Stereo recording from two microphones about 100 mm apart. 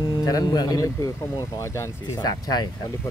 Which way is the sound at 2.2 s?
45° left (ahead or behind).